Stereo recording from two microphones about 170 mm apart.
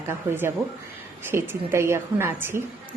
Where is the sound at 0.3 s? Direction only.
15° right (ahead or behind).